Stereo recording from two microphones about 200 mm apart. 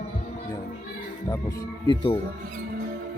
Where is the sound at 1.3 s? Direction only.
15° left (ahead or behind).